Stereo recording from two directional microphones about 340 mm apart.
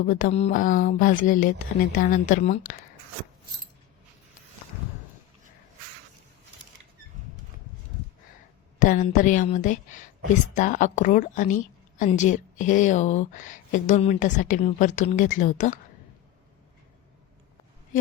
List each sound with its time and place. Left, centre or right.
0.0 s a woman's voice: left
8.8 s a woman's voice: left